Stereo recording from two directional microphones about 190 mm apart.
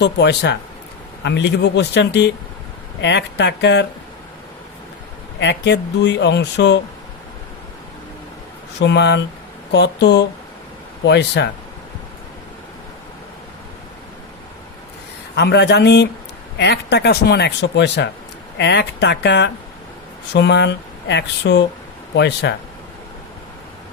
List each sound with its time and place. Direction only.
0.0 s speech: 65° left (ahead or behind)
5.4 s speech: 65° left (ahead or behind)
8.8 s speech: 65° left (ahead or behind)
15.4 s speech: 60° left (ahead or behind)